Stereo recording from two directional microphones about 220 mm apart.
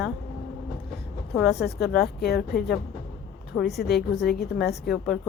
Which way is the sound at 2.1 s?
45° left (ahead or behind).